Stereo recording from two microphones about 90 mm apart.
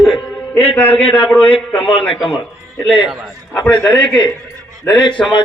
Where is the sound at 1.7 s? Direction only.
90° left.